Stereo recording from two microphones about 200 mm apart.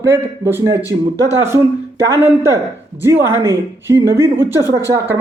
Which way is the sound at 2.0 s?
15° right (ahead or behind).